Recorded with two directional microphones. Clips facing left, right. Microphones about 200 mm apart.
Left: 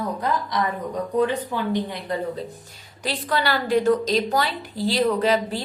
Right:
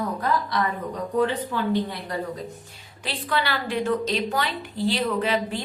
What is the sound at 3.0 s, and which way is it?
A woman's voice, 40° left (ahead or behind).